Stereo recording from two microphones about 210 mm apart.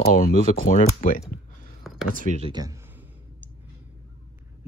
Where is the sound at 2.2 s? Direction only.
30° right (ahead or behind).